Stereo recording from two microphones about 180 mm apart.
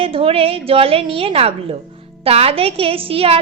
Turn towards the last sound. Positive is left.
turn(degrees=-30)  # may be behind; listen again after turning